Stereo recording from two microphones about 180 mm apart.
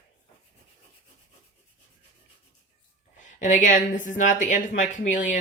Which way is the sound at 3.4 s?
45° left (ahead or behind).